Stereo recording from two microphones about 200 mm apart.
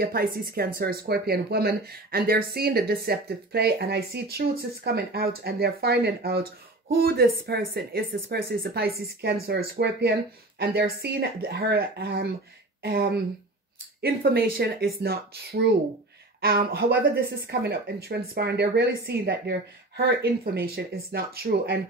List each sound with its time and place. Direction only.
0.0 s speech: 50° right (ahead or behind)